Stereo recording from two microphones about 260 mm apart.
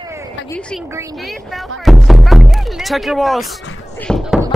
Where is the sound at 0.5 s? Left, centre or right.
Centre.